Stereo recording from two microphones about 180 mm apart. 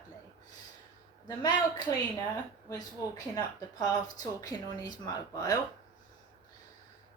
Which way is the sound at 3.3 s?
20° left (ahead or behind).